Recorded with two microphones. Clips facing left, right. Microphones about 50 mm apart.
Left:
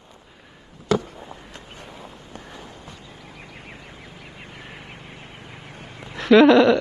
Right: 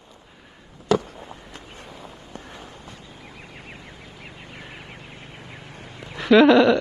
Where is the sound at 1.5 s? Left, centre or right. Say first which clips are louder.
Even; left.